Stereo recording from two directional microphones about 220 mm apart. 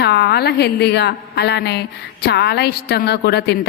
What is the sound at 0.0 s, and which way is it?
A woman's voice, 50° left (ahead or behind).